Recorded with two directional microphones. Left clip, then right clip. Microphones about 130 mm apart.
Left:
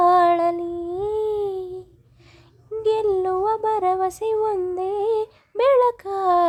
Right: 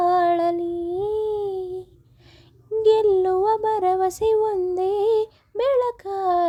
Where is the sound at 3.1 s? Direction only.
20° right (ahead or behind).